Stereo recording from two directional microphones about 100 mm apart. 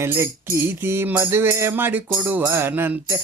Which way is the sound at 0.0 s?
25° right (ahead or behind).